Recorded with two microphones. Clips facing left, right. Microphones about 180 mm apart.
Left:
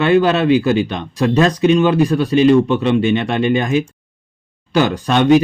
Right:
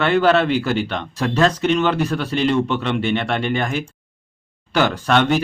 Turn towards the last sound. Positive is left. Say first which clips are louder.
# left 5 dB
turn(degrees=15)  # may be behind; listen again after turning